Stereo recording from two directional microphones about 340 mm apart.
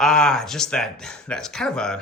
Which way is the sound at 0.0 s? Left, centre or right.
Centre.